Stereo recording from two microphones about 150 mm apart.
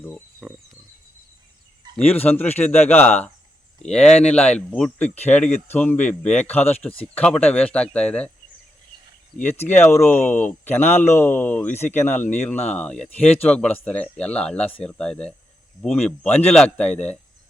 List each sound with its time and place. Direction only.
0.4 s speech: 5° right (ahead or behind)
2.0 s speech: 10° left (ahead or behind)
5.0 s speech: 45° left (ahead or behind)
5.3 s speech: 10° left (ahead or behind)
9.4 s speech: 15° left (ahead or behind)